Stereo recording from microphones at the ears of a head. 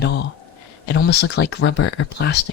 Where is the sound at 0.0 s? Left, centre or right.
Left.